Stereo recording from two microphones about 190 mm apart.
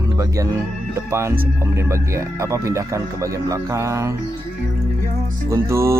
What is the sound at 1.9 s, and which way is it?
Speech, 15° right (ahead or behind).